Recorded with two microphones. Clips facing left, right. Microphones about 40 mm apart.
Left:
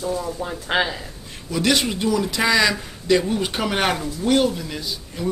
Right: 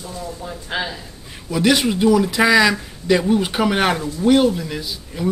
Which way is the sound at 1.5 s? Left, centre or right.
Centre.